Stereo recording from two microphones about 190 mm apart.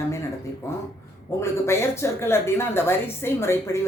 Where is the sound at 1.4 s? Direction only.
15° left (ahead or behind).